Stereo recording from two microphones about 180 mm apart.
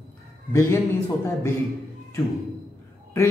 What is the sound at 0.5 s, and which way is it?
Speech, 15° left (ahead or behind).